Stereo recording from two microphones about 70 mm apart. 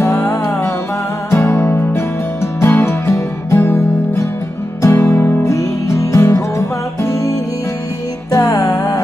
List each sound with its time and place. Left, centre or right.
0.0 s music: left
5.4 s music: left
8.3 s music: left